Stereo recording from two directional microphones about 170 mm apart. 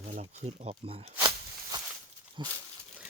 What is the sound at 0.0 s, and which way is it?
Speech, 40° right (ahead or behind).